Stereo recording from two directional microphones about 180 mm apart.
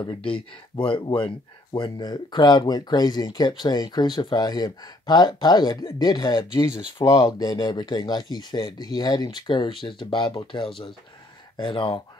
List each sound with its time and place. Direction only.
0.0 s speech: 25° left (ahead or behind)